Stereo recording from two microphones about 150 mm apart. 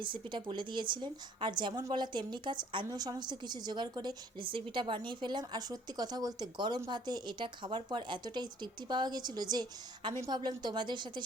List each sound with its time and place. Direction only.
0.0 s a woman's voice: 35° right (ahead or behind)